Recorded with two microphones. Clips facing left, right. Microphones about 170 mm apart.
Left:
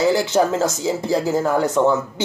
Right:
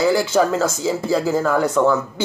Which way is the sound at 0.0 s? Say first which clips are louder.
Even; 20° left (ahead or behind).